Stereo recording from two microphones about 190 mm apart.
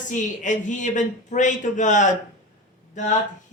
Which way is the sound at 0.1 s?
40° left (ahead or behind).